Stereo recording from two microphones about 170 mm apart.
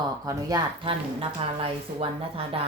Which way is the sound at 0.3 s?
20° right (ahead or behind).